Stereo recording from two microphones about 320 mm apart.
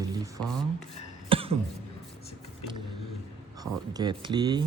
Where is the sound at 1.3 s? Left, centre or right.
Centre.